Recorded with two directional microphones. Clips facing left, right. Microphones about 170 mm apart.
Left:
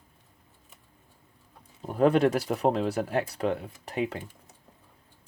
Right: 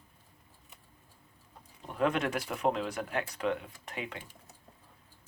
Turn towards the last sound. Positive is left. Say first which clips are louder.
# left 10 dB
turn(degrees=35)  # may be behind; listen again after turning